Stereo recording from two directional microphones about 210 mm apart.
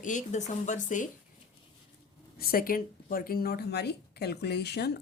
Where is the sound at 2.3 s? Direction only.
45° left (ahead or behind).